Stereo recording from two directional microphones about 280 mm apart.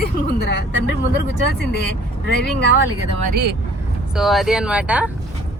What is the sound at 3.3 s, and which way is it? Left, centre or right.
Speech, right.